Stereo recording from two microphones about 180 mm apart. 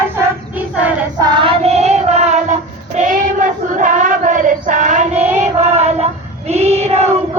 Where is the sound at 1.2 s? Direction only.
30° right (ahead or behind).